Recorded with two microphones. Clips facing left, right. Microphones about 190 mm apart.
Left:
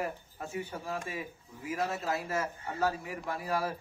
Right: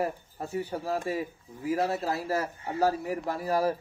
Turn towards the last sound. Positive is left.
turn(degrees=-35)  # may be behind; listen again after turning